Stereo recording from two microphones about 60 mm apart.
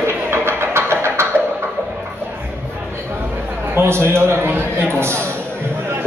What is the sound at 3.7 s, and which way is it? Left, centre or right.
A man's voice, right.